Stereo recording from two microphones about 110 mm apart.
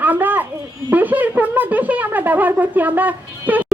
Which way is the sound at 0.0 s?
15° right (ahead or behind).